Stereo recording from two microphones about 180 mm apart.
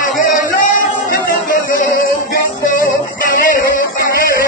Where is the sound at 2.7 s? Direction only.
50° left (ahead or behind).